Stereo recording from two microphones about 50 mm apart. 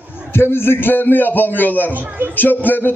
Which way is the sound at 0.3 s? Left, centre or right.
Left.